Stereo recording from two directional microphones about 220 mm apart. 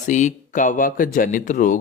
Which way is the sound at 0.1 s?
35° left (ahead or behind).